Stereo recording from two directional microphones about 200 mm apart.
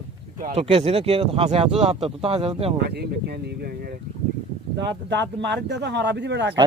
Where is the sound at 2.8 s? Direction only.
55° right (ahead or behind).